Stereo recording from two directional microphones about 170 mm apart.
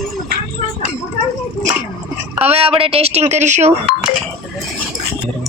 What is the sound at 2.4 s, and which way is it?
Speech, 35° right (ahead or behind).